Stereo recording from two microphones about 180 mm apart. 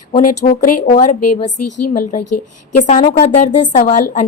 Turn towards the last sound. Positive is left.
turn(degrees=40)  # may be behind; listen again after turning